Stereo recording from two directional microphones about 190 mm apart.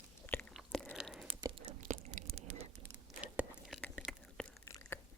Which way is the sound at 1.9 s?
35° right (ahead or behind).